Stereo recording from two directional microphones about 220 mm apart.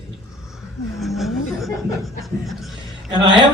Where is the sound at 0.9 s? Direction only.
Centre (ahead or behind).